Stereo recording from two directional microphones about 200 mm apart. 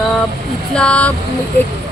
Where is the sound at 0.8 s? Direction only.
5° left (ahead or behind).